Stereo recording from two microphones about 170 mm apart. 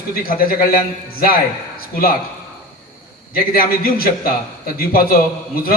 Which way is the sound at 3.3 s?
60° left (ahead or behind).